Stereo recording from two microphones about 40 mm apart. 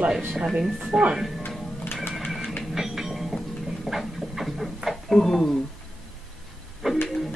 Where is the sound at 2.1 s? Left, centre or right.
Centre.